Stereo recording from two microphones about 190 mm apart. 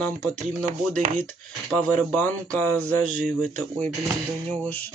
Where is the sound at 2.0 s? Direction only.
10° left (ahead or behind).